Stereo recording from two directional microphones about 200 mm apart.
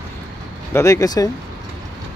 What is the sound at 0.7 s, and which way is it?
Speech, 15° left (ahead or behind).